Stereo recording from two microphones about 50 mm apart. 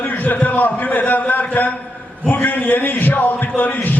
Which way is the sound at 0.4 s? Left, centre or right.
Left.